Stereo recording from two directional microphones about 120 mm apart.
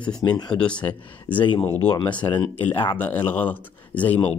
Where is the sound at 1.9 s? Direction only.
40° left (ahead or behind).